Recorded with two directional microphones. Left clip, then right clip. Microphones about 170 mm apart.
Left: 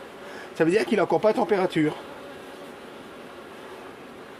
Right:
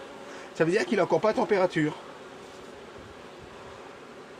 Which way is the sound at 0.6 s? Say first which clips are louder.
Left 3 dB; 45° left (ahead or behind).